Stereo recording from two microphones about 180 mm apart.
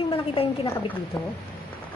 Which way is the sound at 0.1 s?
30° left (ahead or behind).